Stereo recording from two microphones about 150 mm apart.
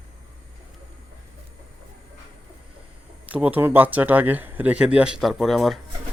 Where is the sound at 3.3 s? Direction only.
10° right (ahead or behind).